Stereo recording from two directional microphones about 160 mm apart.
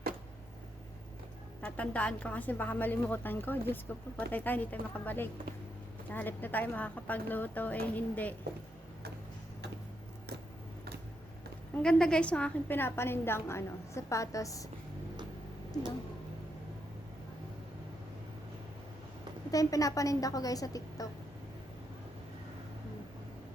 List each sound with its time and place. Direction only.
1.6 s a woman's voice: 10° left (ahead or behind)
11.8 s a woman's voice: 5° left (ahead or behind); by 14.7 s 20° left (ahead or behind)
19.5 s a woman's voice: 20° left (ahead or behind)